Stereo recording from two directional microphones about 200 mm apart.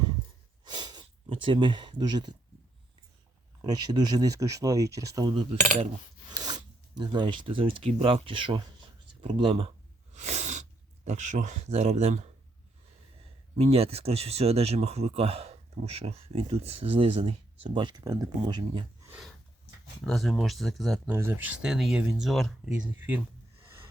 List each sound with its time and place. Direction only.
0.6 s a sound: 20° right (ahead or behind)
3.6 s speech: 20° right (ahead or behind)
13.6 s speech: 30° right (ahead or behind)
20.1 s speech: centre (ahead or behind)
21.2 s speech: 10° right (ahead or behind)